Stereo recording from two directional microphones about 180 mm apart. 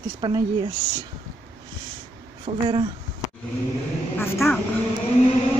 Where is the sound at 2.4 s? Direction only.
25° right (ahead or behind).